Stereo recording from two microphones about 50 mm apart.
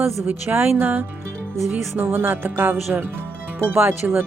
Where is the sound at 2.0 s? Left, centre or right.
Right.